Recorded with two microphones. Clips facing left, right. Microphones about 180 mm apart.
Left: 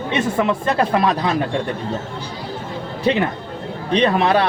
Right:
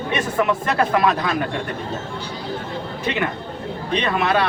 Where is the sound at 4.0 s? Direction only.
35° left (ahead or behind).